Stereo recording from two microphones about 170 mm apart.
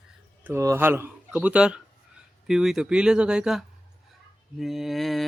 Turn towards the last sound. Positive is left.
turn(degrees=0)  # may be behind; listen again after turning